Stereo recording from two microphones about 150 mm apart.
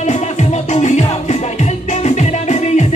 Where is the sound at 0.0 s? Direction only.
50° left (ahead or behind).